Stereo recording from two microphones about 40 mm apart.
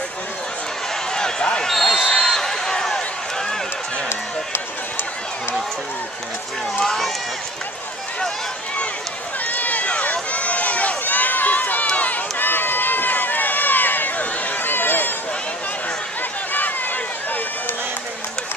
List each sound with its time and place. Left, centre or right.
1.1 s a sound: left
1.7 s basketball bounce: centre
6.8 s run: centre
9.5 s run: left
14.6 s run: left
16.5 s a sound: left